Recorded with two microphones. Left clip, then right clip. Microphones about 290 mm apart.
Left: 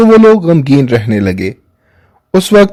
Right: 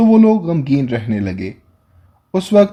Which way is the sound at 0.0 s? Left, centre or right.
Left.